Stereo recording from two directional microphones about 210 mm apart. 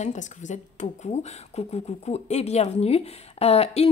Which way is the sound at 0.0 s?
35° left (ahead or behind).